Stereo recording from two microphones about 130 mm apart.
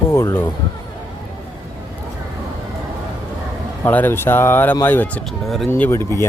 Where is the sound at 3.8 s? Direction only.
15° left (ahead or behind).